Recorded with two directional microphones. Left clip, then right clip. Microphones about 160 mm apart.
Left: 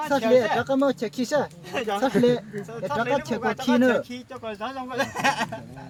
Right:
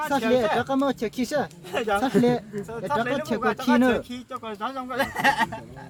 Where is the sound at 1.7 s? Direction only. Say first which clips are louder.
Right 1 dB; 20° left (ahead or behind).